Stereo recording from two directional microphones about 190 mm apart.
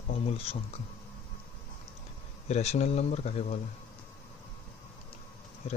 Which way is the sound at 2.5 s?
35° left (ahead or behind).